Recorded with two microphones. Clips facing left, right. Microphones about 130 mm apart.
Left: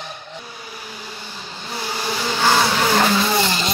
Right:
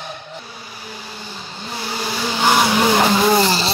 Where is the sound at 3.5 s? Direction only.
35° right (ahead or behind).